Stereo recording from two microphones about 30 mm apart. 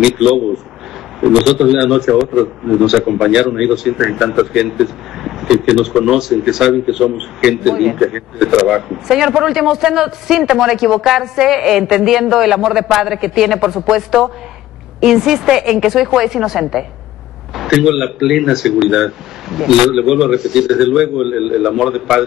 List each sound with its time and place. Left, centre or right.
1.2 s a man's voice: centre